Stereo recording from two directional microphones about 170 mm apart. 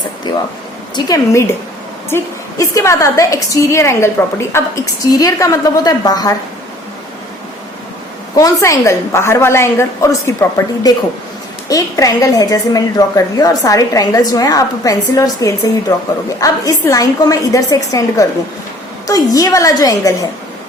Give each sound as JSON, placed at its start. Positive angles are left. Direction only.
{"t": 0.9, "sound": "a woman's voice", "side_deg": 20}
{"t": 8.4, "sound": "a woman's voice", "side_deg": 20}
{"t": 11.7, "sound": "a woman's voice", "side_deg": 20}